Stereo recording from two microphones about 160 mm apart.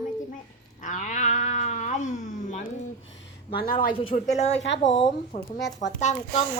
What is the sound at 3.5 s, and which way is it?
Speech, 65° left (ahead or behind).